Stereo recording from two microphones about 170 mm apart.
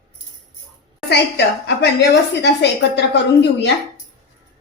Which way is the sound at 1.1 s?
80° left.